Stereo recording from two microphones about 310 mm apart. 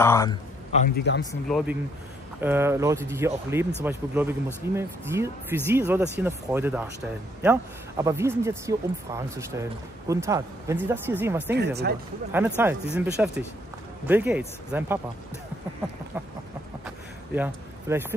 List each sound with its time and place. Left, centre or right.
0.0 s a man's voice: centre
0.9 s speech: left
1.5 s speech: centre
8.0 s speech: centre
11.5 s speech: right
12.3 s speech: centre
17.4 s speech: centre